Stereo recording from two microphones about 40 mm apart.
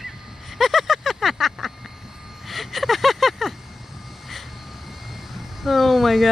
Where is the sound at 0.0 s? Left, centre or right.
Centre.